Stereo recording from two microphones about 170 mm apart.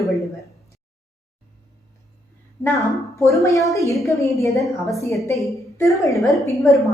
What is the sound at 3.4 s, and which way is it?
A woman's voice, 20° left (ahead or behind).